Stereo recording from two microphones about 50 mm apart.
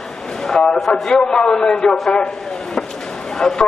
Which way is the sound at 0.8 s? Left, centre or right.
Centre.